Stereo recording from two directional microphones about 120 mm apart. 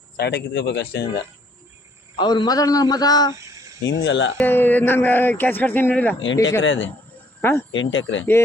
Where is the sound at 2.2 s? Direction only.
40° left (ahead or behind).